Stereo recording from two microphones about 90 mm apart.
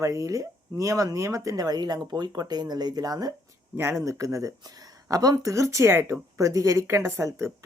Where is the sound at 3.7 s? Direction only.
30° right (ahead or behind).